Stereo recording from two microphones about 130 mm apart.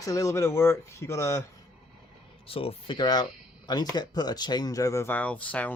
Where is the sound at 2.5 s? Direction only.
45° left (ahead or behind).